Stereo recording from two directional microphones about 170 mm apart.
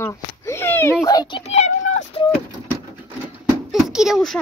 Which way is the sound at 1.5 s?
40° left (ahead or behind).